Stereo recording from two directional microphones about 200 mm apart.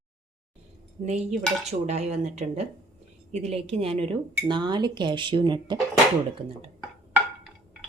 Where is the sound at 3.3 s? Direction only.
30° right (ahead or behind).